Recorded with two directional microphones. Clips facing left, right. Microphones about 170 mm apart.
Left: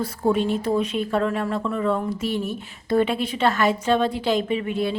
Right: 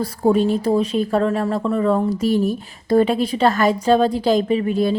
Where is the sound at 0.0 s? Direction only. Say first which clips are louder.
Right 5 dB; 40° right (ahead or behind).